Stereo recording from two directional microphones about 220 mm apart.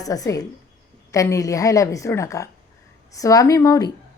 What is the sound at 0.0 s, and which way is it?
A woman's voice, 15° left (ahead or behind).